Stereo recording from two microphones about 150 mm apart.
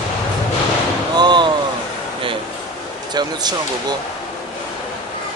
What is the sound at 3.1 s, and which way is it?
Speech, 30° right (ahead or behind).